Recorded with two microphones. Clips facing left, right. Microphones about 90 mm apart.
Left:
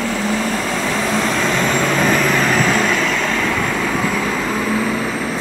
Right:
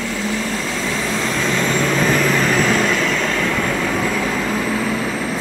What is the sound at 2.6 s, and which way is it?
Vehicle, 35° left (ahead or behind).